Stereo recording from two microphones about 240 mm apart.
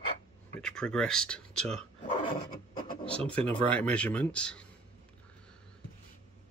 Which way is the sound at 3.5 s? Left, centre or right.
Centre.